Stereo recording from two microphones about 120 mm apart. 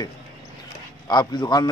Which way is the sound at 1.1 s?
35° left (ahead or behind).